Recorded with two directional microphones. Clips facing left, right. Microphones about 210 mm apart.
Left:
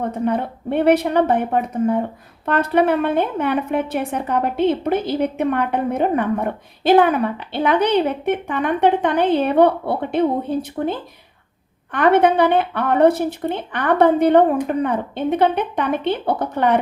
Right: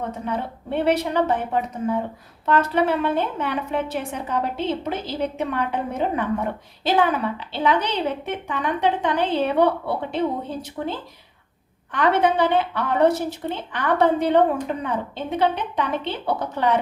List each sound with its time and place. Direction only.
0.3 s a woman's voice: 55° left (ahead or behind)